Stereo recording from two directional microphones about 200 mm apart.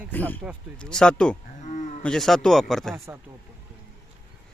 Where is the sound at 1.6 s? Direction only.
35° left (ahead or behind).